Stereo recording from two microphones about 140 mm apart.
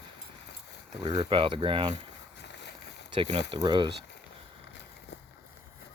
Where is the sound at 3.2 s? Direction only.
35° right (ahead or behind).